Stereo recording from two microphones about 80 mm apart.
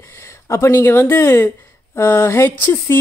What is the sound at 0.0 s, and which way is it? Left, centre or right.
A woman's voice, left.